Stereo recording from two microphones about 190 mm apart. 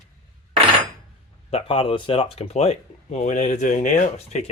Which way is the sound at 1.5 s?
30° left (ahead or behind).